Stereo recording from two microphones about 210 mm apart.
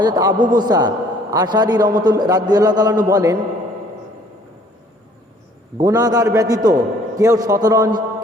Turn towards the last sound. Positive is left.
turn(degrees=-15)  # may be behind; listen again after turning